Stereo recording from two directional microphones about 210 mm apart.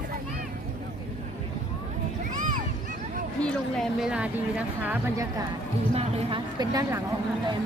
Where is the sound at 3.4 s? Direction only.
Centre (ahead or behind).